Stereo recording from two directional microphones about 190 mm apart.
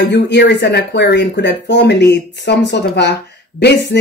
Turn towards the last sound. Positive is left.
turn(degrees=60)  # may be behind; listen again after turning